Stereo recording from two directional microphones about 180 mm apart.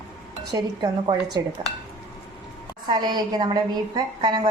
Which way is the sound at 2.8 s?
25° right (ahead or behind).